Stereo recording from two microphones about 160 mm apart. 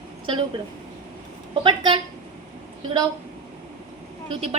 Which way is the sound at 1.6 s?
30° right (ahead or behind).